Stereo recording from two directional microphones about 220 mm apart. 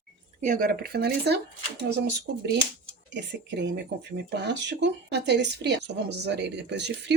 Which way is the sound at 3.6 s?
50° right (ahead or behind).